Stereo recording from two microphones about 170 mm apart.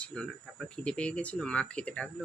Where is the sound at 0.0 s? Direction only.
5° left (ahead or behind).